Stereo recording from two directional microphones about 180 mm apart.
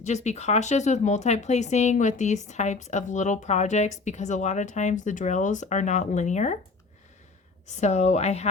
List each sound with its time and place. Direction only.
0.0 s speech: 40° left (ahead or behind)
7.7 s speech: 40° left (ahead or behind)